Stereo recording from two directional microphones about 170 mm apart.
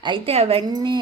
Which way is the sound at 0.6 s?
25° right (ahead or behind).